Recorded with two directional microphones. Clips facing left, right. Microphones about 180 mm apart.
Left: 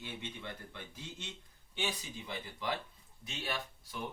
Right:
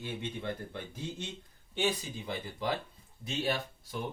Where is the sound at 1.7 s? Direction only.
40° right (ahead or behind).